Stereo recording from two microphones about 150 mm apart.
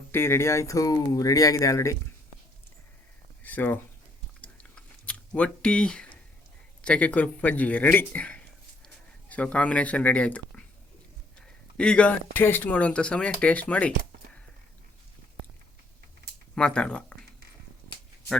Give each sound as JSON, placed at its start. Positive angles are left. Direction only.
{"t": 0.1, "sound": "speech", "side_deg": 15}
{"t": 3.4, "sound": "speech", "side_deg": 10}
{"t": 4.4, "sound": "chewing", "side_deg": 10}
{"t": 6.8, "sound": "speech", "side_deg": 10}
{"t": 16.6, "sound": "speech", "side_deg": 5}